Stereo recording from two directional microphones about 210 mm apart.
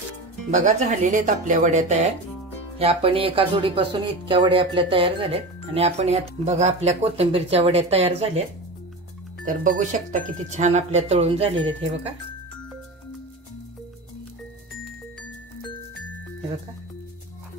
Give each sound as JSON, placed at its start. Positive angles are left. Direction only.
{"t": 0.5, "sound": "speech", "side_deg": -35}